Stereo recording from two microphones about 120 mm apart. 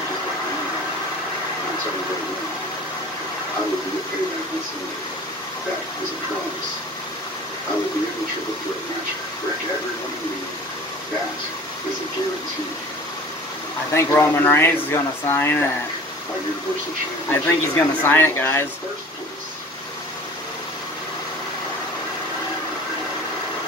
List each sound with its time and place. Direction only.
13.9 s speech: 20° left (ahead or behind)
17.3 s speech: 20° left (ahead or behind)